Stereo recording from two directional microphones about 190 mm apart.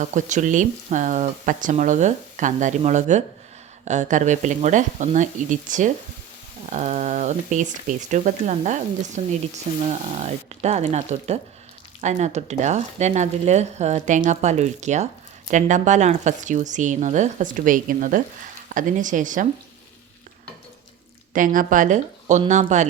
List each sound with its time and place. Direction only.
0.0 s speech: 40° right (ahead or behind)
21.3 s speech: 45° right (ahead or behind)